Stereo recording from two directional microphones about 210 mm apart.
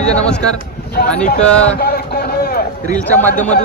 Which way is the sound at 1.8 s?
45° left (ahead or behind).